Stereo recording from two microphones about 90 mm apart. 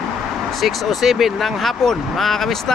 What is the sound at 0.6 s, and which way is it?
Speech, centre (ahead or behind).